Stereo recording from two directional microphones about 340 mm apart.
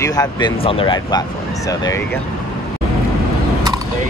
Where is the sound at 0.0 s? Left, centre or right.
Centre.